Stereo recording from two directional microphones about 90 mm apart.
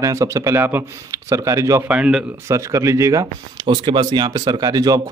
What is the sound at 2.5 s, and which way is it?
Speech, 35° right (ahead or behind).